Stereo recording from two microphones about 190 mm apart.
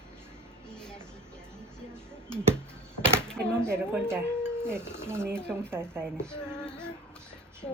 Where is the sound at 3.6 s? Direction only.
15° right (ahead or behind).